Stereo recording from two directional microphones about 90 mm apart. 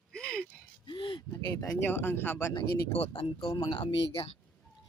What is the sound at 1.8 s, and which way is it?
Speech, 25° left (ahead or behind).